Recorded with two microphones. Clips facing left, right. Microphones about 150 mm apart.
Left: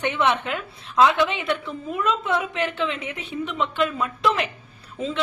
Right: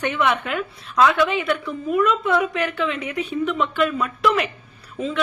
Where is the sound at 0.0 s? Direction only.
25° left (ahead or behind).